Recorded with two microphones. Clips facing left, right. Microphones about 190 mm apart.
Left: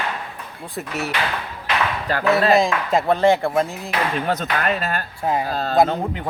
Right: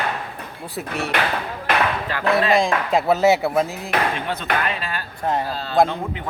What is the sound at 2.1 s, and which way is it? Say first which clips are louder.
Speech: left 5 dB; 40° left (ahead or behind).